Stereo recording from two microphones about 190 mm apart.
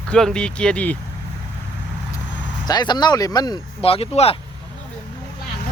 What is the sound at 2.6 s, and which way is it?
Speech, 20° left (ahead or behind).